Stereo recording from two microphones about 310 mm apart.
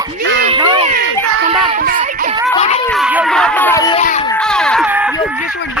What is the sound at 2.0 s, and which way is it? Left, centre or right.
Music, right.